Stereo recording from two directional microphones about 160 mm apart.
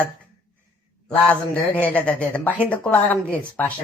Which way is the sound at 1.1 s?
10° left (ahead or behind).